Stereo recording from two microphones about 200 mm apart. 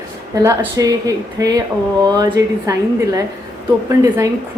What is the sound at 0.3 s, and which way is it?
Speech, 15° right (ahead or behind).